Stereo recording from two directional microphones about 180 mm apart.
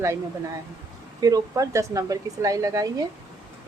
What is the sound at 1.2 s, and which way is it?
Speech, 20° right (ahead or behind).